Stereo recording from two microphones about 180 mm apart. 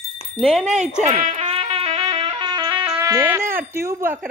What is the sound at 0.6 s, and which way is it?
Speech, 40° right (ahead or behind).